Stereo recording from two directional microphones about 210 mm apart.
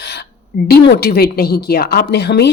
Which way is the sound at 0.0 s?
55° left (ahead or behind).